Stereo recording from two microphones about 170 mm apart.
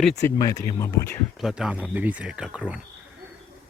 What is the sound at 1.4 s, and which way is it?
Speech, centre (ahead or behind).